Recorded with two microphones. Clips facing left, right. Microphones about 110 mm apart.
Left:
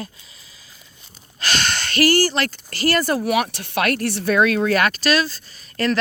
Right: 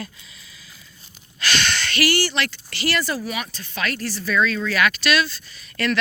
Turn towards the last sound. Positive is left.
turn(degrees=40)  # may be behind; listen again after turning